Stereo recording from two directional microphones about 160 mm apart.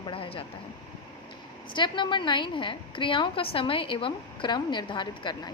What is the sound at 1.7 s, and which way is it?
A woman's voice, 30° left (ahead or behind).